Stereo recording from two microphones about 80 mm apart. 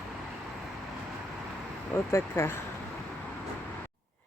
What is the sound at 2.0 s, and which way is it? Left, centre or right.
Speech, left.